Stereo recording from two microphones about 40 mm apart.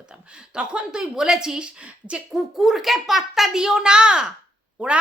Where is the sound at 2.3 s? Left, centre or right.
Centre.